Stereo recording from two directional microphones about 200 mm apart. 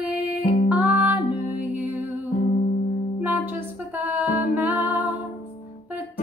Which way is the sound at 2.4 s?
45° left (ahead or behind).